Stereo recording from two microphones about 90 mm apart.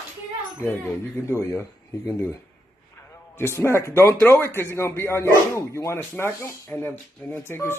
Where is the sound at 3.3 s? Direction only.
30° left (ahead or behind).